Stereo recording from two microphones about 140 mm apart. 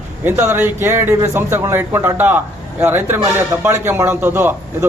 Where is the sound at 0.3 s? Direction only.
15° right (ahead or behind).